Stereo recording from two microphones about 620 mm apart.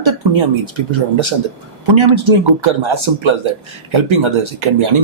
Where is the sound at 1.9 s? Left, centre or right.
Right.